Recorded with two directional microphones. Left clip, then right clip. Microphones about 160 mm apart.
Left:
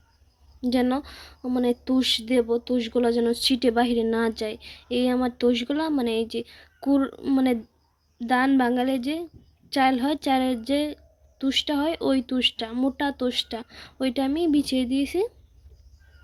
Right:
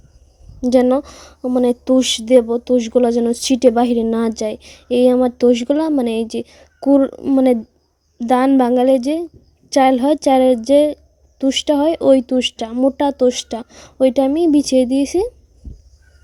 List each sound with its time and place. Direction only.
0.6 s a woman's voice: 60° right (ahead or behind)